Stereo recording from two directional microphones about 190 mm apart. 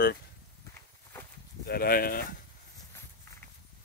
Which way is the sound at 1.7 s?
50° left (ahead or behind).